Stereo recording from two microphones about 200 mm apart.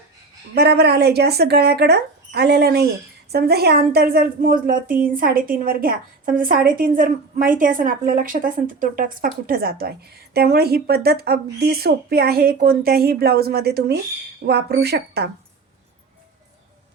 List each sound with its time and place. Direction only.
0.5 s speech: 55° right (ahead or behind)